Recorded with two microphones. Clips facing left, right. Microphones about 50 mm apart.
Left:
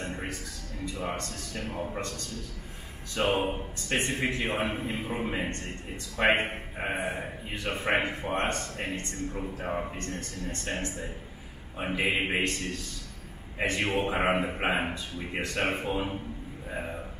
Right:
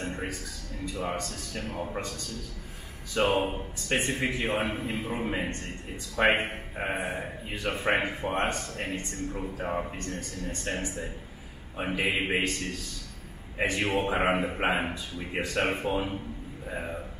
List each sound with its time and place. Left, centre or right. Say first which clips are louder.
0.0 s music: right 1 dB; centre
1.2 s speech: even; centre
1.8 s speech: even; centre
3.2 s speech: right 2 dB; centre
3.9 s speech: right 1 dB; centre
11.8 s speech: even; centre